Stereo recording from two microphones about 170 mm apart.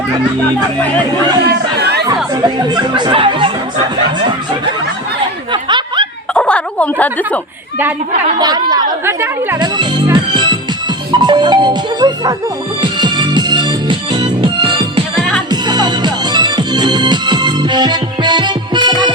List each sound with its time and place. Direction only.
1.5 s chatter: 75° right (ahead or behind)
2.4 s speech: 25° right (ahead or behind)
5.5 s snicker: 30° right (ahead or behind)
6.3 s a sound: 5° left (ahead or behind)
8.4 s speech: 25° right (ahead or behind)
9.0 s speech: 15° right (ahead or behind)
9.6 s music: 25° right (ahead or behind)
11.1 s speech: 25° right (ahead or behind)
12.8 s music: 25° right (ahead or behind)